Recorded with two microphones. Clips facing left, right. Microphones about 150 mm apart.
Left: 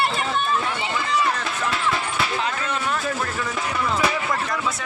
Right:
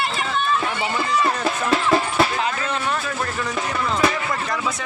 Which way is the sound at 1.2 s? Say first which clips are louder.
Right 3 dB; 40° right (ahead or behind).